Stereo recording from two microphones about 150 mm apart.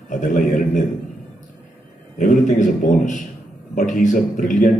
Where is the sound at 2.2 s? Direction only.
55° left (ahead or behind).